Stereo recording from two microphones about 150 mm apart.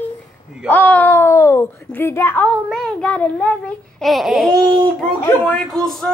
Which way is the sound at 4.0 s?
Centre (ahead or behind).